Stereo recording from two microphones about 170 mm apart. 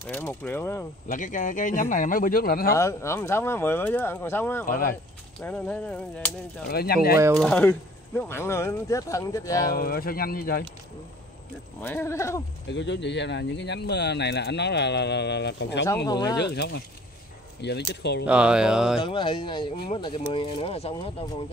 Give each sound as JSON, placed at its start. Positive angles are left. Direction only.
{"t": 0.0, "sound": "speech", "side_deg": 10}
{"t": 1.0, "sound": "speech", "side_deg": 50}
{"t": 2.7, "sound": "speech", "side_deg": 15}
{"t": 4.6, "sound": "speech", "side_deg": 55}
{"t": 5.4, "sound": "speech", "side_deg": 10}
{"t": 6.7, "sound": "speech", "side_deg": 65}
{"t": 7.3, "sound": "speech", "side_deg": 5}
{"t": 9.8, "sound": "speech", "side_deg": 60}
{"t": 11.8, "sound": "speech", "side_deg": 15}
{"t": 12.6, "sound": "speech", "side_deg": 90}
{"t": 16.1, "sound": "speech", "side_deg": 25}
{"t": 16.3, "sound": "speech", "side_deg": 80}
{"t": 18.2, "sound": "speech", "side_deg": -5}
{"t": 19.0, "sound": "speech", "side_deg": 30}